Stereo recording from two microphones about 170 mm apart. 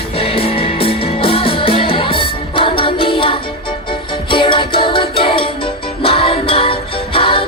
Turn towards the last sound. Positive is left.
turn(degrees=30)  # may be behind; listen again after turning